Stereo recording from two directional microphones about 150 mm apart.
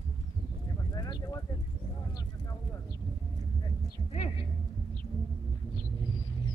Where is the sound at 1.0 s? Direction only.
20° left (ahead or behind).